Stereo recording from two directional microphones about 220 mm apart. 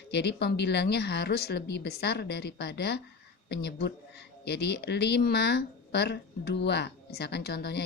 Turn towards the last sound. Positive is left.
turn(degrees=45)  # may be behind; listen again after turning